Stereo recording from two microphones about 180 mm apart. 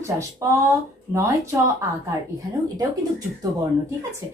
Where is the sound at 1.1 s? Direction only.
15° right (ahead or behind).